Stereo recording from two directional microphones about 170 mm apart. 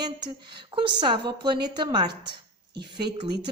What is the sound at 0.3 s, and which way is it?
A woman's voice, 30° right (ahead or behind).